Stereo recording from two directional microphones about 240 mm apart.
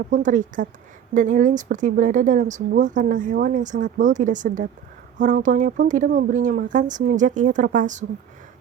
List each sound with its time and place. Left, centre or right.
0.1 s speech: right